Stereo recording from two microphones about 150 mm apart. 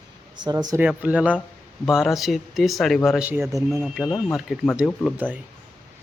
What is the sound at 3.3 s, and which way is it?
Speech, 15° right (ahead or behind).